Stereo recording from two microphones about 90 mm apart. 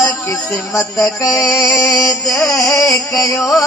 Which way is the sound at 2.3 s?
35° left (ahead or behind).